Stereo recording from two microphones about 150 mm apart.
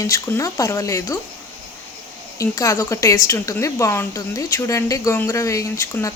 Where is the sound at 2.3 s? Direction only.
20° left (ahead or behind).